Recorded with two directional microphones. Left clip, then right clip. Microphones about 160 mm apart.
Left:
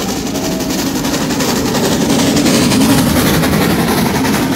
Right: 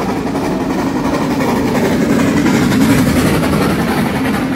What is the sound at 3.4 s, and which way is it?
Vehicle, 50° right (ahead or behind).